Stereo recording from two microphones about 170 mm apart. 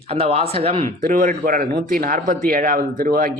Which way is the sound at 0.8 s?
50° right (ahead or behind).